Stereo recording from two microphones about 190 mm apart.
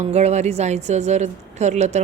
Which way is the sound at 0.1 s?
35° right (ahead or behind).